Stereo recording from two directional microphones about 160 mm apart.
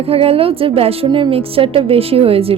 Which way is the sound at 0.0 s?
35° right (ahead or behind).